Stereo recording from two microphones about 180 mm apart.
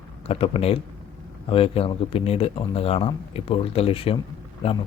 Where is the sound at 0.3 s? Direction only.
30° left (ahead or behind).